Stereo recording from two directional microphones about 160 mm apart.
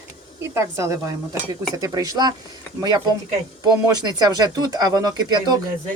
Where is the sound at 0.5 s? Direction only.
20° right (ahead or behind).